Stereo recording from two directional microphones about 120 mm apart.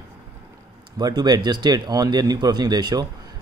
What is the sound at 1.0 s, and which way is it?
Speech, 35° right (ahead or behind).